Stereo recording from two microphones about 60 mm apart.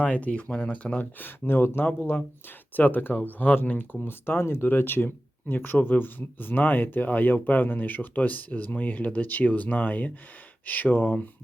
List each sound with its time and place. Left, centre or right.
0.0 s speech: left
1.2 s speech: left